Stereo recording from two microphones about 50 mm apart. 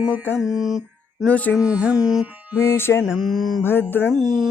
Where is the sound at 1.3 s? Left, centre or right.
Left.